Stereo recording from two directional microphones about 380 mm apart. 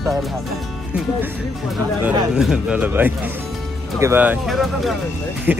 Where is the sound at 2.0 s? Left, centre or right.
Centre.